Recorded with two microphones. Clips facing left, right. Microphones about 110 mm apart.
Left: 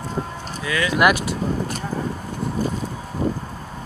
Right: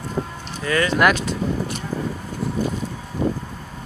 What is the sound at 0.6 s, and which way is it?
Speech, 45° right (ahead or behind).